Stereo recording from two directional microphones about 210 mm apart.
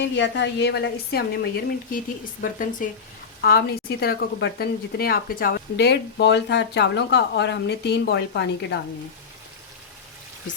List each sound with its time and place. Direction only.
0.0 s speech: 60° left (ahead or behind)